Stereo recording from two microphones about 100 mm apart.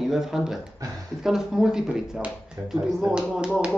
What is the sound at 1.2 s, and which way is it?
Speech, 5° right (ahead or behind).